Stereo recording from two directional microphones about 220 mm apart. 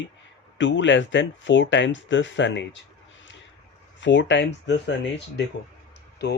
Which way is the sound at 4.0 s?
55° left (ahead or behind).